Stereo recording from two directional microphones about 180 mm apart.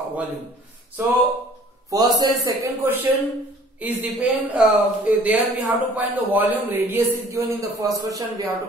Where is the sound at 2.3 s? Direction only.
15° right (ahead or behind).